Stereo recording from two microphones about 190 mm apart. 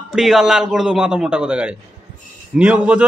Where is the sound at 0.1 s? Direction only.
Centre (ahead or behind).